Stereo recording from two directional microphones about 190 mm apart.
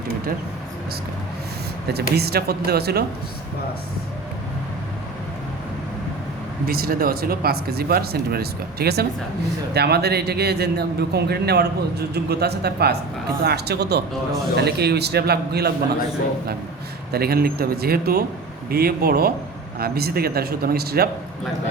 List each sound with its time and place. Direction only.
1.9 s a man's voice: 60° right (ahead or behind)
6.7 s a man's voice: 50° right (ahead or behind)
17.1 s a man's voice: 55° right (ahead or behind)